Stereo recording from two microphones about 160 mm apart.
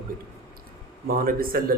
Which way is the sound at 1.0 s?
65° right (ahead or behind).